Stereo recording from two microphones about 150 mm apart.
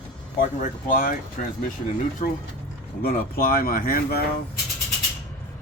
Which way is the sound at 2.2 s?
40° left (ahead or behind).